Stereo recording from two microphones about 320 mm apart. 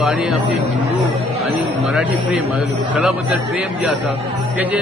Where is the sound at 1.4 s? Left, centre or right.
Centre.